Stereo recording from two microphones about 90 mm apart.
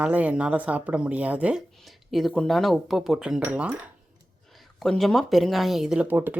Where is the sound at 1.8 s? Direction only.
Centre (ahead or behind).